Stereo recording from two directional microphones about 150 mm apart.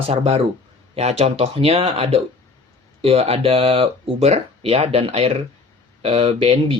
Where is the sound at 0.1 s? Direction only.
40° right (ahead or behind).